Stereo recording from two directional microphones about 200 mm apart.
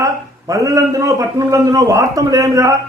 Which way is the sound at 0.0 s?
15° right (ahead or behind).